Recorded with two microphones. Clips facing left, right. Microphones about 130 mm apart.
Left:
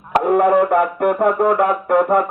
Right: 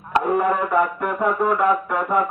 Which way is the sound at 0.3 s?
60° left (ahead or behind).